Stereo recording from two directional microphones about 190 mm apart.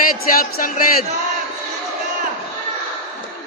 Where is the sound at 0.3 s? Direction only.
50° left (ahead or behind).